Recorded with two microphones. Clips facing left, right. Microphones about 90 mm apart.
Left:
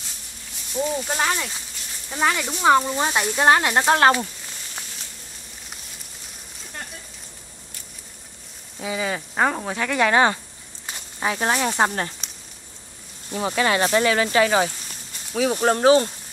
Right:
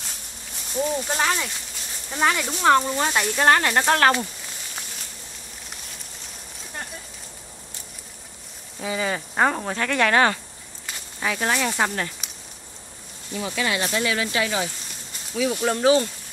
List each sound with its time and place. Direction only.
0.7 s speech: centre (ahead or behind); by 4.1 s 15° left (ahead or behind)
8.7 s speech: centre (ahead or behind)
9.9 s speech: 20° left (ahead or behind)
13.3 s speech: 40° left (ahead or behind)